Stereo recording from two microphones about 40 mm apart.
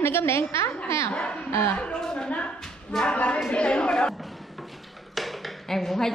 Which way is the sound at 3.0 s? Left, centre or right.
Left.